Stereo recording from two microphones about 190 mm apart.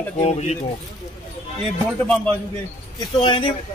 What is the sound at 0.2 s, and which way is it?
Speech, 35° left (ahead or behind).